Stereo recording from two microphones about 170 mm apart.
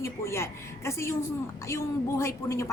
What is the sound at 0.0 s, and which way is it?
A woman's voice, 15° left (ahead or behind).